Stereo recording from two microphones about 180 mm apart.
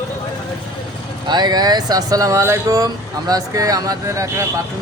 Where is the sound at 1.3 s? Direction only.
25° right (ahead or behind).